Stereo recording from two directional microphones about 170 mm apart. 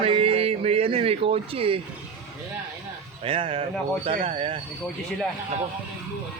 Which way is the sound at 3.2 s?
30° right (ahead or behind).